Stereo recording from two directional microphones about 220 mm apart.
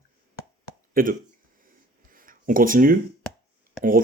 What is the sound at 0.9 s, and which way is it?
Speech, 40° right (ahead or behind).